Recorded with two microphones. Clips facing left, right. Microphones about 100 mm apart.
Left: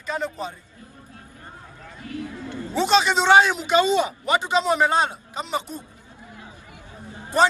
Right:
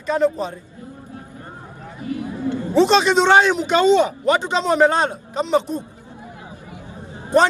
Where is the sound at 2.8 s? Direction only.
Centre (ahead or behind).